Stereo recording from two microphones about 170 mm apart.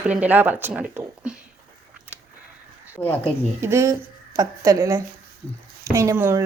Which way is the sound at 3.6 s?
15° right (ahead or behind).